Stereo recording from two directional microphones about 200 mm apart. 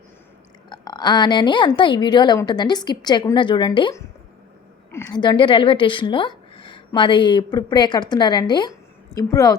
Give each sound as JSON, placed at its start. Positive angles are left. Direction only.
{"t": 0.7, "sound": "a woman's voice", "side_deg": 20}